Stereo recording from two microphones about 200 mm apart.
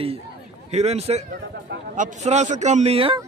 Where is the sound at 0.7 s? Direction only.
30° right (ahead or behind).